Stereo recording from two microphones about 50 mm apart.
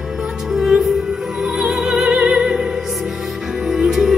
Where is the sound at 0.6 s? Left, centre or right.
Centre.